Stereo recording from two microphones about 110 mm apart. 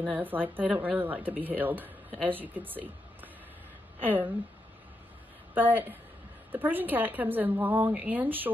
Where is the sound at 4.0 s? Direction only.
15° right (ahead or behind).